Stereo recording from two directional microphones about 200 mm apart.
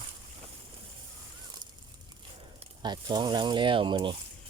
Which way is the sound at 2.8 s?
20° right (ahead or behind).